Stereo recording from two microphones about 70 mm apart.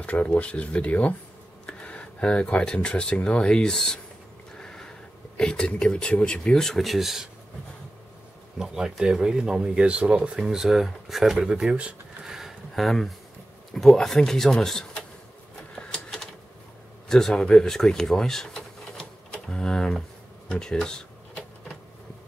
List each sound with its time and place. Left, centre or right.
0.0 s speech: centre
4.6 s a sound: centre
5.4 s speech: centre
8.5 s speech: centre
12.2 s a sound: centre
13.7 s speech: centre
15.7 s typewriter: centre
17.1 s speech: centre